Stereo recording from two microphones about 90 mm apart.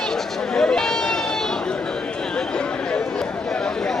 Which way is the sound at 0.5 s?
5° left (ahead or behind).